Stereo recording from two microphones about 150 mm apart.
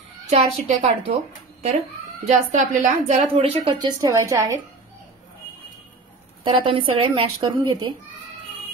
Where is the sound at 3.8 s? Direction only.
25° right (ahead or behind).